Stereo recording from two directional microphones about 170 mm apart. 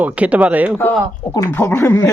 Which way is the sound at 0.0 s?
10° right (ahead or behind).